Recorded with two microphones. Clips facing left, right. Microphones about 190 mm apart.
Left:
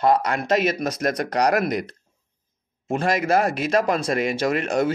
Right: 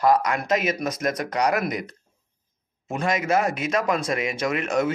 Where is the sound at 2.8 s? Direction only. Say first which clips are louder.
Left 3 dB; 30° left (ahead or behind).